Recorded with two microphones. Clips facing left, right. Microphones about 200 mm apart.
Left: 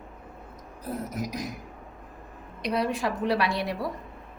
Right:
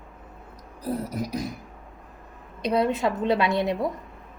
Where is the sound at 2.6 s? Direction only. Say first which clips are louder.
Right 4 dB; 25° right (ahead or behind).